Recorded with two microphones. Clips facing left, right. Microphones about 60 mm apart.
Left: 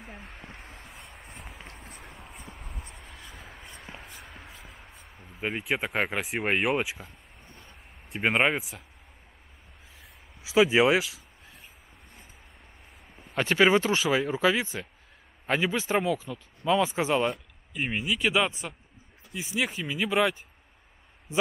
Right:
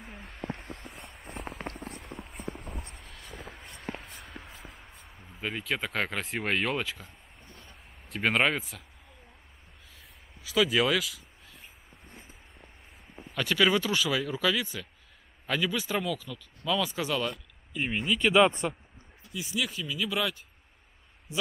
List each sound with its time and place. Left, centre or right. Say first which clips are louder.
0.0 s a sound: right 3 dB; centre
2.8 s vehicle: even; centre
3.3 s a sound: right 6 dB; centre
3.9 s a sound: right 8 dB; right
4.2 s a sound: right 1 dB; centre
5.4 s speech: left 3 dB; centre
8.1 s speech: left 2 dB; centre
8.5 s speech: left 2 dB; centre
10.4 s speech: left 5 dB; centre
11.0 s speech: left 3 dB; centre
13.4 s speech: left 4 dB; centre
17.7 s speech: even; centre
19.3 s speech: left 3 dB; left